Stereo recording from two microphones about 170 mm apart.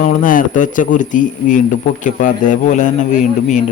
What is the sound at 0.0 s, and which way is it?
A man's voice, 50° left (ahead or behind).